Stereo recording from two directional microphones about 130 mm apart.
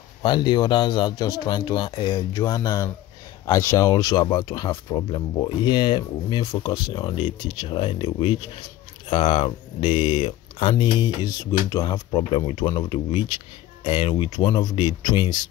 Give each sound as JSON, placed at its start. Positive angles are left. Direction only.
{"t": 0.2, "sound": "speech", "side_deg": 35}
{"t": 13.8, "sound": "speech", "side_deg": 45}